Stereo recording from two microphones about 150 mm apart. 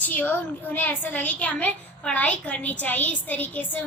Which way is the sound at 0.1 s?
10° left (ahead or behind).